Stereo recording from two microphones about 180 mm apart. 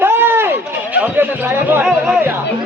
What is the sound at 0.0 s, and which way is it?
Run, 10° right (ahead or behind).